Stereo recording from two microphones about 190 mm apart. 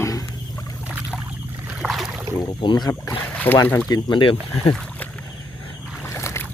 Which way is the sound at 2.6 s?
25° left (ahead or behind).